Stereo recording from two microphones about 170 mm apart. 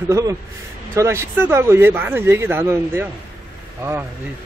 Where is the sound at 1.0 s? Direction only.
15° right (ahead or behind).